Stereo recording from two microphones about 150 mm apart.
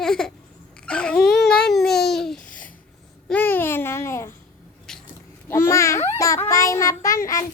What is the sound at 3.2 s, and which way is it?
Babbling, 10° left (ahead or behind).